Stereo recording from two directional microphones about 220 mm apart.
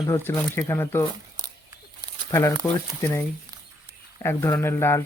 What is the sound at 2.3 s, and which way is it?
Speech, 15° left (ahead or behind).